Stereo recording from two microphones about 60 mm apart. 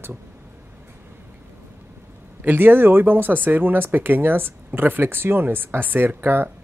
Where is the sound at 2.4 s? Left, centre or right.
Right.